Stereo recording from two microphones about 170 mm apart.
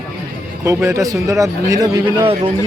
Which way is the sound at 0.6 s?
20° right (ahead or behind).